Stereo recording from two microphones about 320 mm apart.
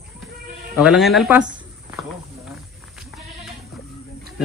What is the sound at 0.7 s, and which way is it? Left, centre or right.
Speech, centre.